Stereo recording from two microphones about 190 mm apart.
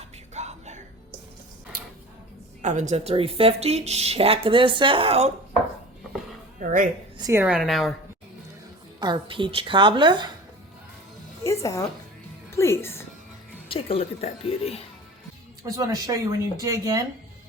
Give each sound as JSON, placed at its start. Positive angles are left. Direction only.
{"t": 0.3, "sound": "a sound", "side_deg": -35}
{"t": 2.6, "sound": "a woman's voice", "side_deg": -40}
{"t": 6.6, "sound": "a woman's voice", "side_deg": -45}
{"t": 7.2, "sound": "speech", "side_deg": -15}
{"t": 7.4, "sound": "a woman's voice", "side_deg": -5}
{"t": 9.0, "sound": "a woman's voice", "side_deg": -25}
{"t": 11.4, "sound": "a woman's voice", "side_deg": 15}
{"t": 13.7, "sound": "a woman's voice", "side_deg": 30}
{"t": 15.7, "sound": "speech", "side_deg": -15}